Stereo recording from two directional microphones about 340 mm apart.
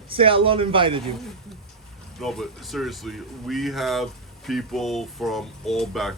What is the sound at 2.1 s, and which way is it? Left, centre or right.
Speech, centre.